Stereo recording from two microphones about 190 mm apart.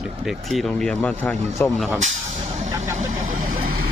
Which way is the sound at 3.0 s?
40° right (ahead or behind).